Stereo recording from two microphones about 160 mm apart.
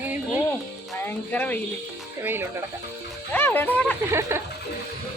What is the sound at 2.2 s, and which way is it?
Speech, 15° right (ahead or behind).